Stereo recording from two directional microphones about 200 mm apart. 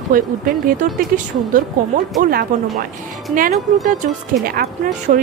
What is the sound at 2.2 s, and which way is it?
Speech, 45° right (ahead or behind).